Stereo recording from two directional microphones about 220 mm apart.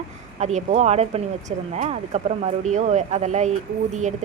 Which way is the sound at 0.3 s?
30° right (ahead or behind).